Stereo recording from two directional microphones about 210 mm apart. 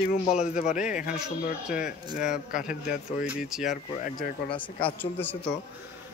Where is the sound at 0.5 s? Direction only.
35° left (ahead or behind).